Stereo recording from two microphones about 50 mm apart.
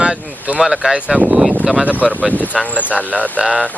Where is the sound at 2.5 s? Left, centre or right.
Centre.